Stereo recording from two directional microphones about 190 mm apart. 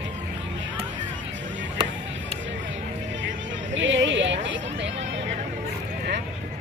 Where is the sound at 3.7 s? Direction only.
75° right (ahead or behind).